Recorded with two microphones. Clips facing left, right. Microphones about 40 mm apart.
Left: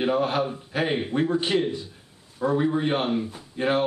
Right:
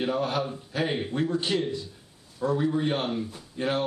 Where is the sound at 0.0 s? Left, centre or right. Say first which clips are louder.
Left 4 dB; left.